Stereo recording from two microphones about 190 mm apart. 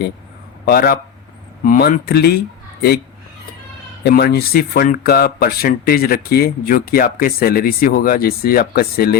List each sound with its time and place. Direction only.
0.6 s a man's voice: 50° left (ahead or behind)
4.0 s speech: 55° left (ahead or behind)